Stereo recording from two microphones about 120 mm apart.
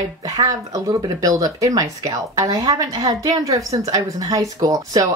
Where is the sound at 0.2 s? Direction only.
30° right (ahead or behind).